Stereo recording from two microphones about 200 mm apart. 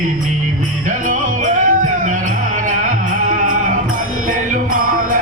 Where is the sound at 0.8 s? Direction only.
40° right (ahead or behind).